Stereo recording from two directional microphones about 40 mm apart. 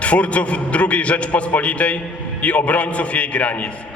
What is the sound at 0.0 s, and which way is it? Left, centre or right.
A man's voice, left.